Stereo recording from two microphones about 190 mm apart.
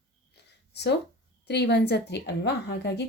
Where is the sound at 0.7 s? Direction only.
60° left (ahead or behind).